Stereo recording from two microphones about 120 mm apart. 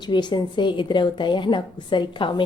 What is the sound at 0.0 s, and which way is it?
A woman's voice, 40° left (ahead or behind).